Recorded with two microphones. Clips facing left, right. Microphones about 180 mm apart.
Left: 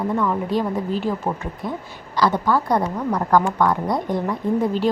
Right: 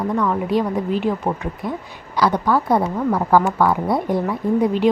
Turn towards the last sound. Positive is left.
turn(degrees=0)  # may be behind; listen again after turning